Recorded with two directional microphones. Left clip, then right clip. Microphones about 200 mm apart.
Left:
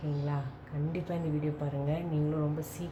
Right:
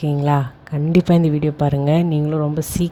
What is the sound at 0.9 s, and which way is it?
A woman's voice, 50° right (ahead or behind).